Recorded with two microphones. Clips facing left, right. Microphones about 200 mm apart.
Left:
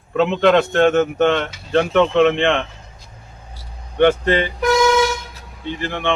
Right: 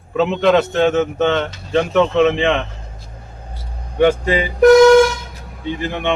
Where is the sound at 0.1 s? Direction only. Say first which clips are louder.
Even; centre (ahead or behind).